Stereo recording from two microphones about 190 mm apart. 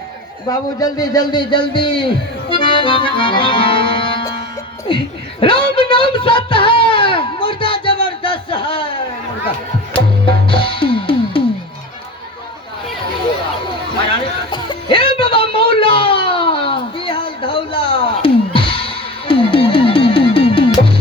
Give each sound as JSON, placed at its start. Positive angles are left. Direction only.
{"t": 0.4, "sound": "a man's voice", "side_deg": 20}
{"t": 1.3, "sound": "music", "side_deg": 25}
{"t": 5.4, "sound": "a sound", "side_deg": 25}
{"t": 9.9, "sound": "music", "side_deg": 25}
{"t": 14.5, "sound": "music", "side_deg": 25}